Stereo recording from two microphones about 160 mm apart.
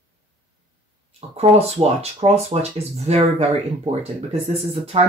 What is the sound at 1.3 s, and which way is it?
Speech, 40° right (ahead or behind).